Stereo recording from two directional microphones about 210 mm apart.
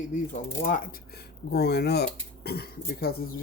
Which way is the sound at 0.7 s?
40° left (ahead or behind).